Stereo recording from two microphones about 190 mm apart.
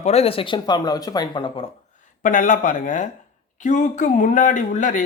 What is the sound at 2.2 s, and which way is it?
Speech, 45° left (ahead or behind).